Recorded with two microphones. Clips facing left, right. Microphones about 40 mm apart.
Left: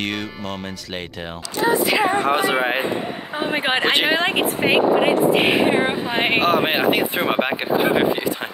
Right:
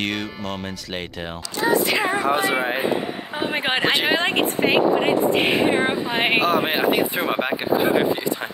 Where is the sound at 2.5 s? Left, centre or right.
Left.